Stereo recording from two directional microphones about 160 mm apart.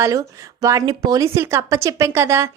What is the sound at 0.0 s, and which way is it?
Speech, 20° right (ahead or behind).